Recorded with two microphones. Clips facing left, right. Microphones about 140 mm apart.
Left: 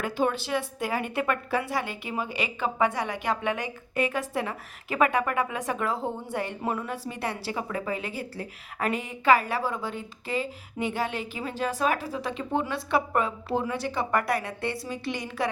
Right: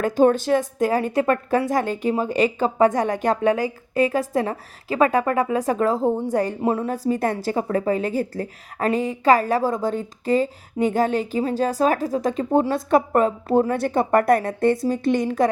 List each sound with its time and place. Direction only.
0.0 s a woman's voice: 45° right (ahead or behind)